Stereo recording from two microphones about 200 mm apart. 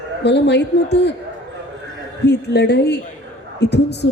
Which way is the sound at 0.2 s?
60° left (ahead or behind).